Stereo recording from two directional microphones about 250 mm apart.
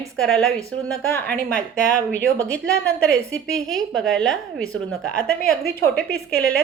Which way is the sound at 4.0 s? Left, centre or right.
Centre.